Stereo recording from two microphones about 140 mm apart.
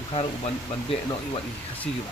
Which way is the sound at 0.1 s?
40° left (ahead or behind).